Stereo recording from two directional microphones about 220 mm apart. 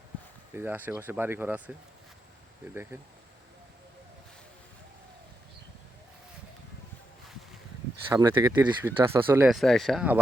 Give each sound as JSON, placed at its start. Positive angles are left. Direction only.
{"t": 0.5, "sound": "speech", "side_deg": -10}
{"t": 2.9, "sound": "speech", "side_deg": -10}
{"t": 8.1, "sound": "speech", "side_deg": -15}